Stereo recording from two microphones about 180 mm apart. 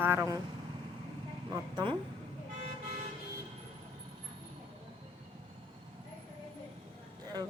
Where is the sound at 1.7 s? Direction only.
30° right (ahead or behind).